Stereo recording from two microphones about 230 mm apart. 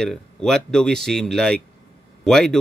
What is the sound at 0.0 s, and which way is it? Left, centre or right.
Speech, centre.